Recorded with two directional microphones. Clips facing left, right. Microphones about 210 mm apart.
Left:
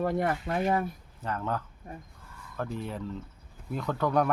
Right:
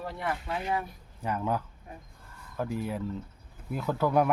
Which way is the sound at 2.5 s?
10° right (ahead or behind).